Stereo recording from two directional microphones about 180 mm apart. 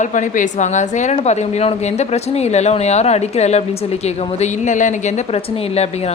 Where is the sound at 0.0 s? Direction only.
45° left (ahead or behind).